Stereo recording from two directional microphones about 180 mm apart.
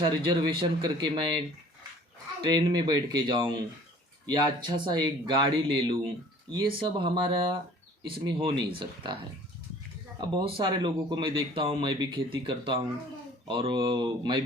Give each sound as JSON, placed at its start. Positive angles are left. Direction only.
{"t": 0.0, "sound": "speech", "side_deg": -25}
{"t": 2.4, "sound": "speech", "side_deg": -25}
{"t": 10.2, "sound": "speech", "side_deg": -25}